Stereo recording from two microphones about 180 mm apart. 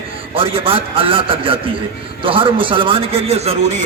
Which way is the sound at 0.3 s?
30° right (ahead or behind).